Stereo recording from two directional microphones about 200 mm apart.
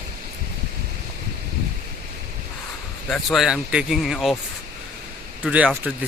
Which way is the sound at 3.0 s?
Centre (ahead or behind).